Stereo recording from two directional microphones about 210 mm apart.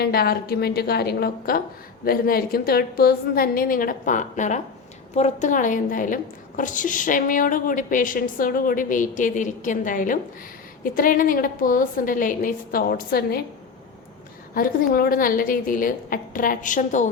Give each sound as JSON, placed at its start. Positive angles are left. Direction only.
{"t": 0.0, "sound": "a woman's voice", "side_deg": 45}
{"t": 14.5, "sound": "a woman's voice", "side_deg": 45}